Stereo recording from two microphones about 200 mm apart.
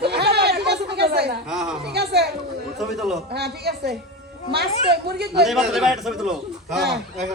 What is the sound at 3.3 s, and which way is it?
A woman's voice, 55° right (ahead or behind).